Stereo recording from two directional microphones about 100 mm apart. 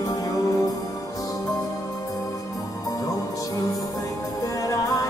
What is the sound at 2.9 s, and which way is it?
Music, 35° left (ahead or behind).